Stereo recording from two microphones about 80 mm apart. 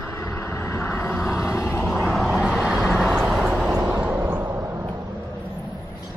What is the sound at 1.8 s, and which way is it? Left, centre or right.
Vehicle, centre.